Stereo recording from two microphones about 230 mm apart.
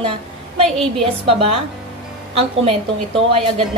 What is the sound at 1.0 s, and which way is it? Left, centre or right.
Speech, right.